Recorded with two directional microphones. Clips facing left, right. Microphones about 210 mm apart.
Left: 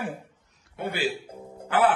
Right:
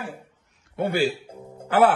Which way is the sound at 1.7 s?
40° right (ahead or behind).